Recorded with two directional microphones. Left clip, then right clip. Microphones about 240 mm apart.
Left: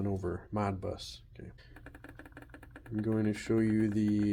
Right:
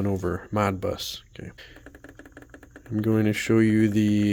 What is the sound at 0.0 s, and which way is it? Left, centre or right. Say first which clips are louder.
Speech: right 9 dB; right.